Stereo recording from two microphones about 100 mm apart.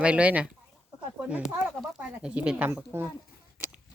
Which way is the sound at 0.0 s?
10° right (ahead or behind).